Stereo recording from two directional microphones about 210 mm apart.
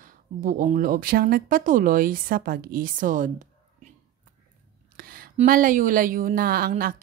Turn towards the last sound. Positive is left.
turn(degrees=-45)  # may be behind; listen again after turning